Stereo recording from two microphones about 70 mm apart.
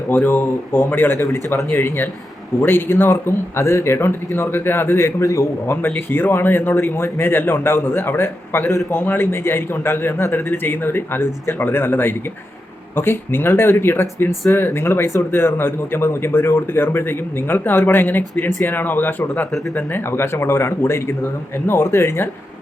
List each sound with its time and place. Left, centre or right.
0.1 s speech: left
1.2 s speech: left
6.8 s speech: left
8.9 s speech: left
19.5 s speech: centre
19.9 s speech: left